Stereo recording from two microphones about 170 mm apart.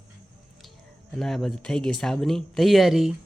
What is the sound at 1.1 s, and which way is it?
Speech, centre (ahead or behind).